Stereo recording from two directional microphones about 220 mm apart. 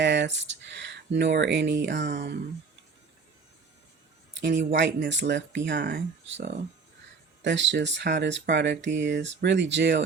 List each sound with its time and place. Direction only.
0.0 s speech: 55° right (ahead or behind)
4.4 s speech: 55° right (ahead or behind)